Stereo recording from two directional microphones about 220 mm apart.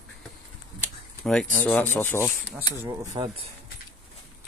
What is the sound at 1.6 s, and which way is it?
Rub, 5° left (ahead or behind).